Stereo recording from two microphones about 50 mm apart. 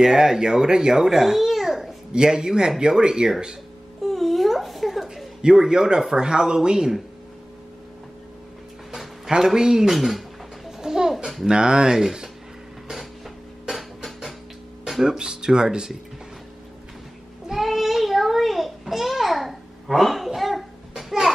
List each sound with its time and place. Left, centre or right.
0.0 s a child's voice: centre
2.1 s speech: centre
4.0 s a sound: centre
5.4 s speech: centre
8.9 s speech: centre
10.8 s babbling: centre
11.4 s speech: centre
13.7 s a sound: centre
14.9 s speech: centre
17.5 s a sound: centre
20.3 s cough: centre